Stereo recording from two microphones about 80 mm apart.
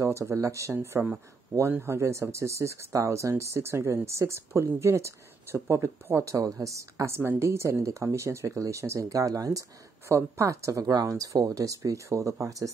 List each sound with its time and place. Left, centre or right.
0.0 s speech: right
0.7 s speech: right
1.7 s speech: right
7.2 s speech: right